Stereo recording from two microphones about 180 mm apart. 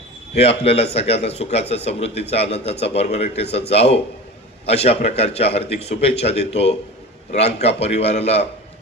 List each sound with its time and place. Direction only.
0.3 s speech: 35° left (ahead or behind)